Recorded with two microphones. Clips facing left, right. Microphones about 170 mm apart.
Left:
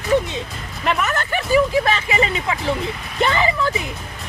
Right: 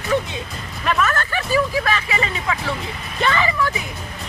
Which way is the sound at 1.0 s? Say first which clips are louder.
Left 1 dB; 20° left (ahead or behind).